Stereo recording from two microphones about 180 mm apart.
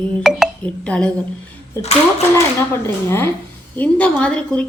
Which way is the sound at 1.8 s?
35° left (ahead or behind).